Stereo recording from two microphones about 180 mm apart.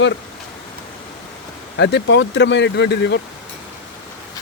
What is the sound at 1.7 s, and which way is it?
Speech, 80° left.